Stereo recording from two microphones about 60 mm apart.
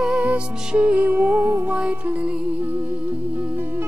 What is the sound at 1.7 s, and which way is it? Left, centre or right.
Music, right.